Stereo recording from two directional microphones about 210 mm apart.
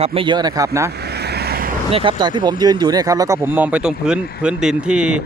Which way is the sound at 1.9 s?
25° right (ahead or behind).